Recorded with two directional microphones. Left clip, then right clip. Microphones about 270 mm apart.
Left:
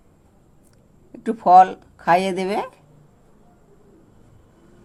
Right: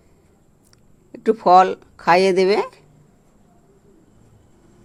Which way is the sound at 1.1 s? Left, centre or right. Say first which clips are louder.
Even; right.